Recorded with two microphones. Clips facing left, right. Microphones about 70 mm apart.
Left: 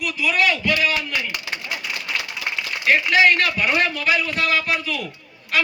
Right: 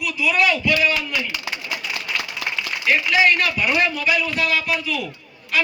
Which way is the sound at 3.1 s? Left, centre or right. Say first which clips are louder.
Left 1 dB; left.